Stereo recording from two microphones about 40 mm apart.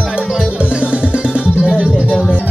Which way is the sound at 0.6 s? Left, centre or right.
Right.